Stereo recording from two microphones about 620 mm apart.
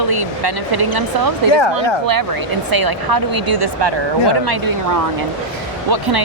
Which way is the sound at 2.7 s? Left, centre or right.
Right.